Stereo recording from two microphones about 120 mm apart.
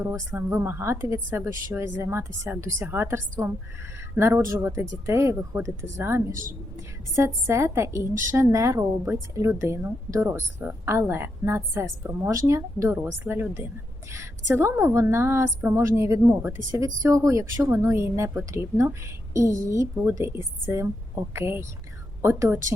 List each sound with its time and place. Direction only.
0.0 s a woman's voice: 20° right (ahead or behind)
7.4 s a woman's voice: 25° right (ahead or behind)